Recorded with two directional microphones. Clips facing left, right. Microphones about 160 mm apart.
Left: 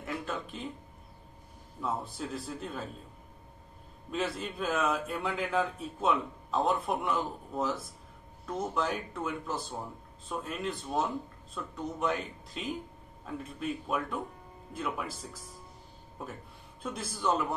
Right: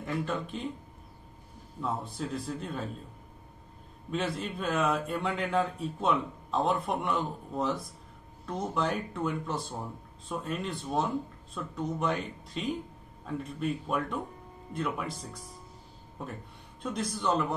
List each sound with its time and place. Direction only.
0.0 s speech: centre (ahead or behind)
1.8 s speech: centre (ahead or behind)
4.1 s speech: centre (ahead or behind)